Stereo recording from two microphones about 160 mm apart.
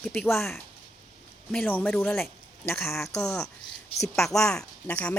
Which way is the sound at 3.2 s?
20° left (ahead or behind).